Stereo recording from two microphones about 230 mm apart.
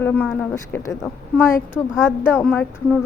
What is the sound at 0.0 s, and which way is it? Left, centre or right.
Child singing, centre.